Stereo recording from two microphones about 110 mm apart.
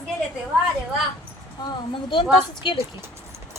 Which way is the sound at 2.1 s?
50° left (ahead or behind).